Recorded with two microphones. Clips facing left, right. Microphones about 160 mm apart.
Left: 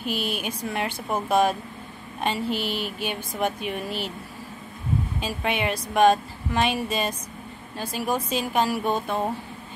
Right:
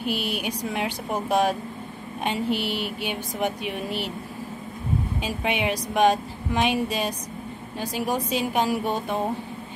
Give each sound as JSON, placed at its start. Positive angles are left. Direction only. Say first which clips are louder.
{"t": 0.0, "sound": "a woman's voice", "louder": "right 1 dB", "side_deg": -15}
{"t": 5.2, "sound": "a woman's voice", "louder": "right 1 dB", "side_deg": -15}